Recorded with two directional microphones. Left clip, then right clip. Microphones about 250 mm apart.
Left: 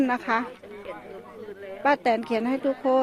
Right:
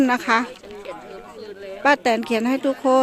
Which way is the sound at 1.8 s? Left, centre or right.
Centre.